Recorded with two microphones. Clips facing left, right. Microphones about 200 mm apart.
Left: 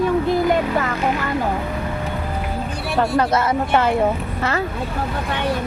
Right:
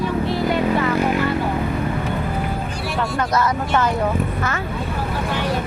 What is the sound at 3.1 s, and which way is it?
Speech, 25° left (ahead or behind).